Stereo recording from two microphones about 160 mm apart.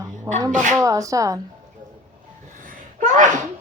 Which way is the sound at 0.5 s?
50° right (ahead or behind).